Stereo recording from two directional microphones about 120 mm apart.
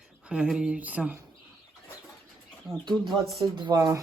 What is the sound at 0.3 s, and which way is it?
Speech, 5° right (ahead or behind).